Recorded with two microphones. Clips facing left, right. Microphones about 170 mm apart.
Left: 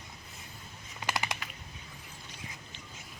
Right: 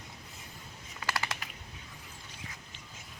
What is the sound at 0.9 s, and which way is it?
Typing, 20° left (ahead or behind).